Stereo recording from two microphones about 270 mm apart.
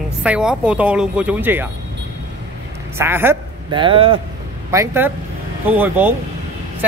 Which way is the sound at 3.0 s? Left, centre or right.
Centre.